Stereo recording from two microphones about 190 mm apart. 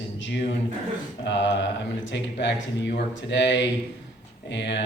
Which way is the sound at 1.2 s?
70° left (ahead or behind).